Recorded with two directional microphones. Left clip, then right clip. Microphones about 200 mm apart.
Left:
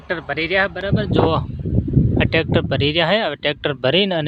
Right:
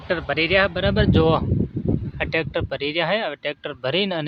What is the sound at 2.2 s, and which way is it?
Speech, 15° left (ahead or behind).